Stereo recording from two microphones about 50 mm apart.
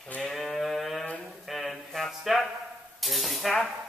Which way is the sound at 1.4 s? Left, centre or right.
Centre.